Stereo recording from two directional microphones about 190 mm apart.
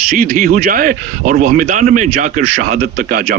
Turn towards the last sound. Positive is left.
turn(degrees=-50)  # may be behind; listen again after turning